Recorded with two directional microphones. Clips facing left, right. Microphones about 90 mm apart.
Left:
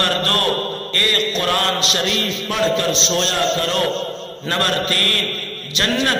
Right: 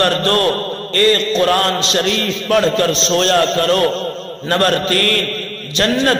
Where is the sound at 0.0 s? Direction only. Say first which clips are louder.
Right 5 dB; 30° right (ahead or behind).